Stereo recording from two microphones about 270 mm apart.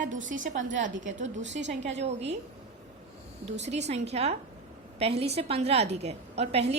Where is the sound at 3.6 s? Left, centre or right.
Right.